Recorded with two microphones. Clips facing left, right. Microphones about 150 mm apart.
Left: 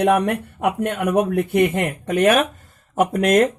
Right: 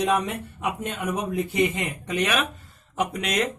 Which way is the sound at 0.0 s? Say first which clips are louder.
Left 7 dB; 60° left (ahead or behind).